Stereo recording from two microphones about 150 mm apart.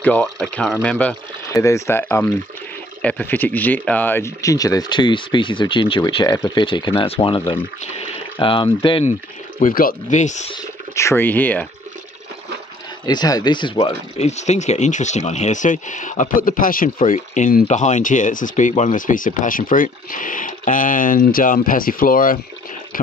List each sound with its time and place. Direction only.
0.0 s speech: 5° left (ahead or behind)
1.5 s speech: 20° left (ahead or behind)
9.6 s speech: 65° left (ahead or behind)
11.0 s speech: 15° left (ahead or behind)
13.0 s speech: 25° left (ahead or behind)
14.1 s speech: 50° left (ahead or behind); by 22.4 s 70° left (ahead or behind)